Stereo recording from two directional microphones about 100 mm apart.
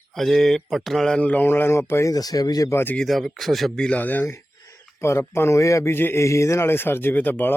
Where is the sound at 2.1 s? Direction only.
40° left (ahead or behind).